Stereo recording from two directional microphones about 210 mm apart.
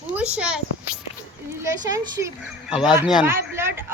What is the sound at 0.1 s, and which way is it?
Speech, 5° right (ahead or behind).